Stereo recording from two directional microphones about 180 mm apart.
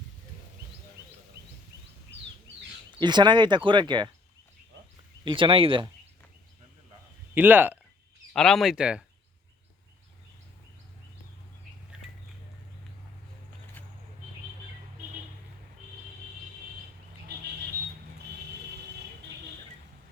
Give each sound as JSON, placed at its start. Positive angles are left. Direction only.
{"t": 3.0, "sound": "speech", "side_deg": -25}
{"t": 5.2, "sound": "speech", "side_deg": -30}
{"t": 7.3, "sound": "speech", "side_deg": -10}
{"t": 8.3, "sound": "speech", "side_deg": 5}